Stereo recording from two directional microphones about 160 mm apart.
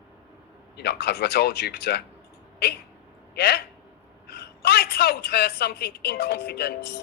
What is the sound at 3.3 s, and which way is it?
A man's voice, 90° left.